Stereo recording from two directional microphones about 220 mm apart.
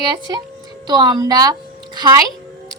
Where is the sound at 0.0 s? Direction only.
20° right (ahead or behind).